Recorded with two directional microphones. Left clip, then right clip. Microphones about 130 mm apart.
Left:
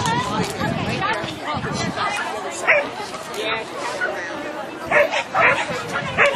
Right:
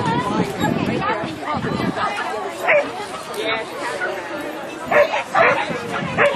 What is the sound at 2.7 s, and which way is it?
Bow-wow, 40° left (ahead or behind).